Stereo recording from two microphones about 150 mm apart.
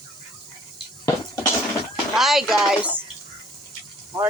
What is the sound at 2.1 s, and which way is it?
Speech, centre (ahead or behind).